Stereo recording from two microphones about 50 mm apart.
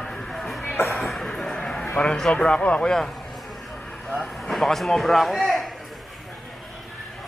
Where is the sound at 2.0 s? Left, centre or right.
Centre.